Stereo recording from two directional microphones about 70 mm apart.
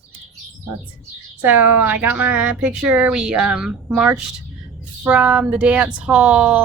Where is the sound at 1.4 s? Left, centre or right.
Right.